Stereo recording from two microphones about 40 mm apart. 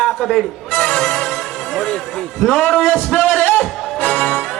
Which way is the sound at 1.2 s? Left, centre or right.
Centre.